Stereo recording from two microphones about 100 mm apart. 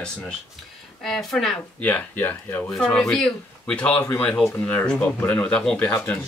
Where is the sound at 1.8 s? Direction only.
15° left (ahead or behind).